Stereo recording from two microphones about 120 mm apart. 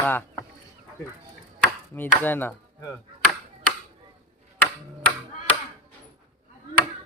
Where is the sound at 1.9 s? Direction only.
15° left (ahead or behind).